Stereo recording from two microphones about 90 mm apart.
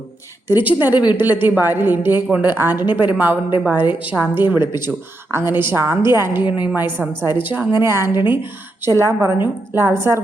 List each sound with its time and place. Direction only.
0.4 s speech: 20° right (ahead or behind)